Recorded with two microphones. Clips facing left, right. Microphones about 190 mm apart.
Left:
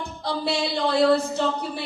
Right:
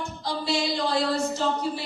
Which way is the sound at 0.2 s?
60° left (ahead or behind).